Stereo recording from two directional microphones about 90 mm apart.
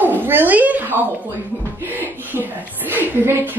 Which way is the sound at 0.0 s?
20° right (ahead or behind).